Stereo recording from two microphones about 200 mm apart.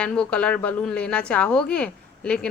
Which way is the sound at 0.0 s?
5° left (ahead or behind).